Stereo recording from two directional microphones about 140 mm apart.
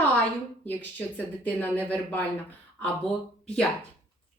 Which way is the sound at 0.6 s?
10° left (ahead or behind).